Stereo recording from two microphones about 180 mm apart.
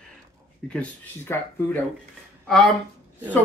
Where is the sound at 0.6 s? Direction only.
5° left (ahead or behind).